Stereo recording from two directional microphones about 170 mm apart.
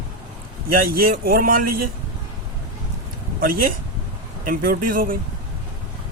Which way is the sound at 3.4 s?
55° right (ahead or behind).